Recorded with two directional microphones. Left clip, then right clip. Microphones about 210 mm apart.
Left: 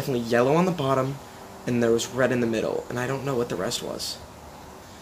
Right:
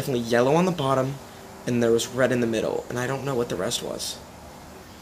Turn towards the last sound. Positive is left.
turn(degrees=40)  # may be behind; listen again after turning